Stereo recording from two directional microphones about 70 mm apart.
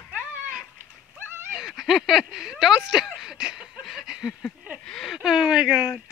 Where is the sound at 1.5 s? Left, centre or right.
Centre.